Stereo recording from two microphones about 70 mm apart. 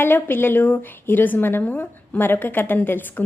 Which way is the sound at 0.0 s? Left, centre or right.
Left.